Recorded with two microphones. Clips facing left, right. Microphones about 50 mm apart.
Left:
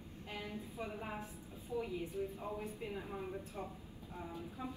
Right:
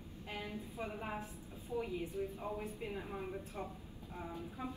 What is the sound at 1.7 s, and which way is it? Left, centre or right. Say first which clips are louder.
A woman's voice: right 1 dB; right.